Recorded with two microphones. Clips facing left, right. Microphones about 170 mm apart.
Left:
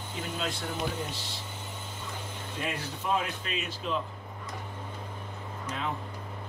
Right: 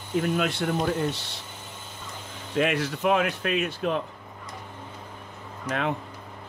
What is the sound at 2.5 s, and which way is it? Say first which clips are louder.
Speech: right 12 dB; 80° right.